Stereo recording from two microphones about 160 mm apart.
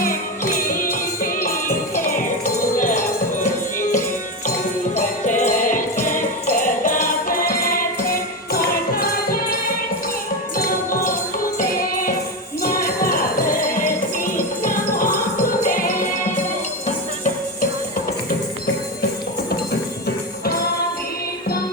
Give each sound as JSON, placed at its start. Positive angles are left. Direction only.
{"t": 0.0, "sound": "music", "side_deg": 60}
{"t": 4.9, "sound": "jingle bell", "side_deg": 50}
{"t": 11.6, "sound": "music", "side_deg": 60}